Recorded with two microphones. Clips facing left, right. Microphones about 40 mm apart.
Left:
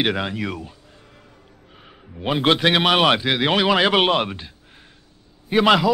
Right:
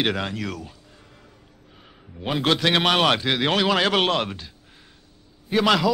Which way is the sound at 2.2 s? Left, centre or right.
Centre.